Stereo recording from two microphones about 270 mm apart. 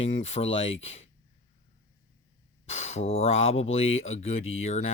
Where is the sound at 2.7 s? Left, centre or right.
Left.